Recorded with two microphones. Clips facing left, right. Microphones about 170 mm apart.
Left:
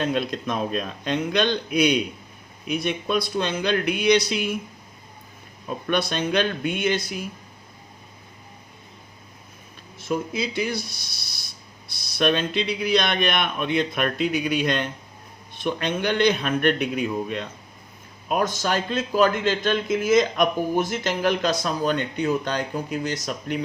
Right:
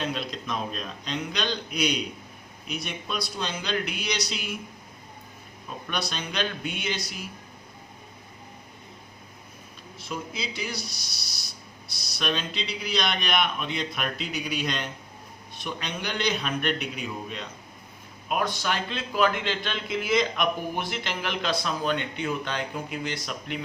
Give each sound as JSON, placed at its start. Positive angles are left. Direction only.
{"t": 0.0, "sound": "a man's voice", "side_deg": 50}
{"t": 5.9, "sound": "a man's voice", "side_deg": 55}
{"t": 10.0, "sound": "a man's voice", "side_deg": 50}
{"t": 18.3, "sound": "a man's voice", "side_deg": 40}